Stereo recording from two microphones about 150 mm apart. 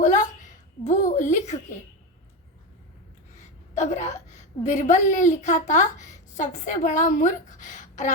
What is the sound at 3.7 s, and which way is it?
A woman's voice, 50° left (ahead or behind).